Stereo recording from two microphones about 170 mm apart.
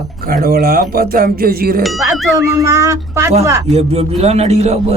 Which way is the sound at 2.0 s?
20° right (ahead or behind).